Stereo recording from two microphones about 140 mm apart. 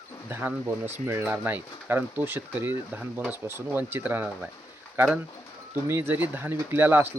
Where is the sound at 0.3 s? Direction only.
15° right (ahead or behind).